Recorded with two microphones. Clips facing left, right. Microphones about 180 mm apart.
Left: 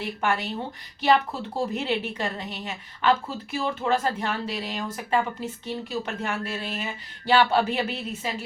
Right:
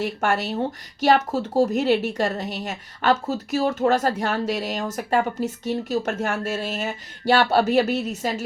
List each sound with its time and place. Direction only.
0.0 s a woman's voice: 45° right (ahead or behind)